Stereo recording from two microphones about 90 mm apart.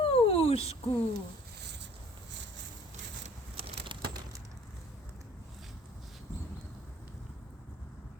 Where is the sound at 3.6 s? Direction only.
70° right (ahead or behind).